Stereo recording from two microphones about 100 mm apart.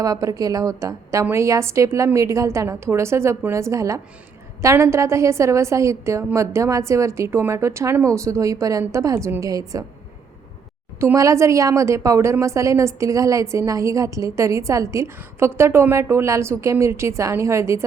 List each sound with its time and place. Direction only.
0.0 s a woman's voice: 35° right (ahead or behind)
11.0 s a woman's voice: 30° right (ahead or behind)